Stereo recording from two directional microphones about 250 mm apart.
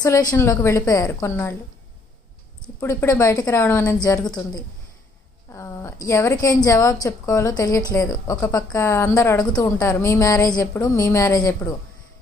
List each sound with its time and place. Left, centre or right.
0.0 s a woman's voice: centre
2.8 s a woman's voice: centre
5.5 s a woman's voice: centre